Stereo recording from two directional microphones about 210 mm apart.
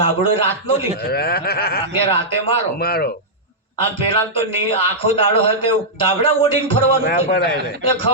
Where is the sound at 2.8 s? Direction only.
50° left (ahead or behind).